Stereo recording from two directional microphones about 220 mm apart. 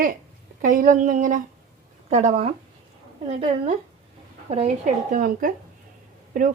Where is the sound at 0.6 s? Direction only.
40° right (ahead or behind).